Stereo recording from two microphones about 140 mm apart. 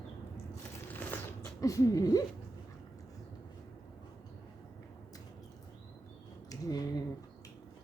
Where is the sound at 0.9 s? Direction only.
15° left (ahead or behind).